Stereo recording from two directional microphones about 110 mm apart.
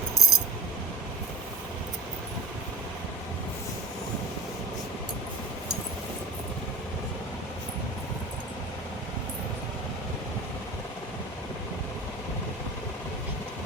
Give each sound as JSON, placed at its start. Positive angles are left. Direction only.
{"t": 0.2, "sound": "coin", "side_deg": 30}